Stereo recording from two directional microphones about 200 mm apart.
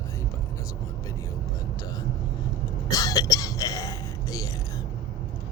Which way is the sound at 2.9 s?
20° left (ahead or behind).